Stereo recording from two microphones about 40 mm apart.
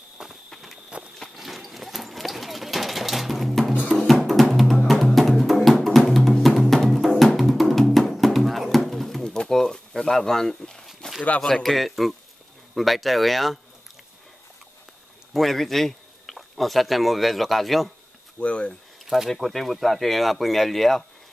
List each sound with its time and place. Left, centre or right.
0.2 s walk: centre
1.2 s clip-clop: centre
4.1 s music: centre
9.2 s pigeon: centre
11.4 s speech: centre
15.3 s speech: centre
18.4 s speech: left
19.0 s speech: centre